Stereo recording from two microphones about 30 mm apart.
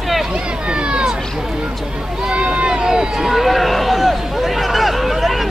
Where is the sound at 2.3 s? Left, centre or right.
Right.